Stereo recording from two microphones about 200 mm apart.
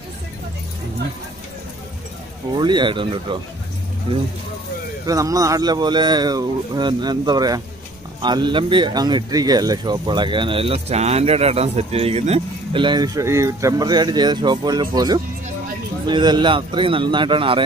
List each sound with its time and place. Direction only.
2.5 s speech: 25° right (ahead or behind)
5.0 s speech: 15° right (ahead or behind)